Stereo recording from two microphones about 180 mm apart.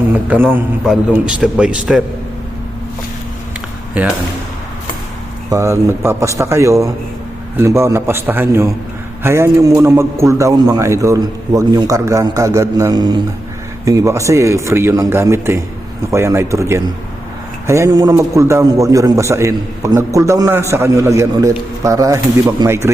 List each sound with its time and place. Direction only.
0.1 s a man's voice: 10° right (ahead or behind)
4.0 s a man's voice: 10° right (ahead or behind)
5.5 s a man's voice: 15° right (ahead or behind)